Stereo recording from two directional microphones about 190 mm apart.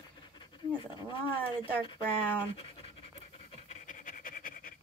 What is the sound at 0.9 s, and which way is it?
Speech, 25° left (ahead or behind).